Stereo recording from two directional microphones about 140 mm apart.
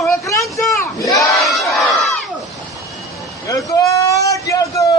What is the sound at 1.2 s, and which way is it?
Battle cry, centre (ahead or behind).